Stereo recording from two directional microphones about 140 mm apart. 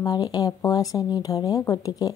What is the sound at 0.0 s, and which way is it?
Speech, 30° left (ahead or behind).